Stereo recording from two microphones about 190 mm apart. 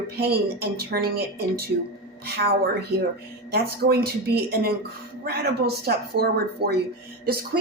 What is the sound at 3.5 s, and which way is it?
A woman's voice, 55° right (ahead or behind).